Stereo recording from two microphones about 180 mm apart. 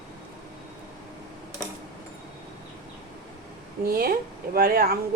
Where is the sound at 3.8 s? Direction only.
55° right (ahead or behind).